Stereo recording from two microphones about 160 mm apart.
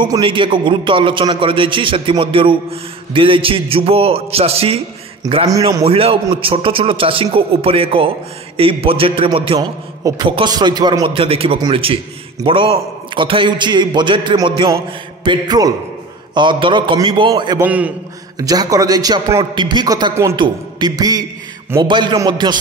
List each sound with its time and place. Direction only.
0.0 s a man's voice: 30° right (ahead or behind)
5.5 s a man's voice: 20° right (ahead or behind)
5.9 s a man's voice: 35° right (ahead or behind)
17.6 s a man's voice: 10° right (ahead or behind)
18.4 s a man's voice: 20° right (ahead or behind)